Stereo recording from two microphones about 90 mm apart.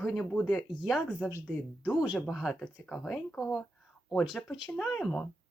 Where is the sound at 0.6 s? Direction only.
5° right (ahead or behind).